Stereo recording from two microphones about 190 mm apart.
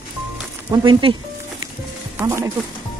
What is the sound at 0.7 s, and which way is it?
Speech, 20° right (ahead or behind).